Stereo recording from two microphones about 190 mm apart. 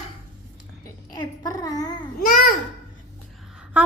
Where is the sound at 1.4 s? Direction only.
20° left (ahead or behind).